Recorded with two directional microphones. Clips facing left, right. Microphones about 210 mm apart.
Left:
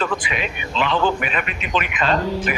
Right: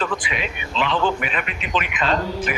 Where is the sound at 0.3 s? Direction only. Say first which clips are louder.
Left 2 dB; 50° left (ahead or behind).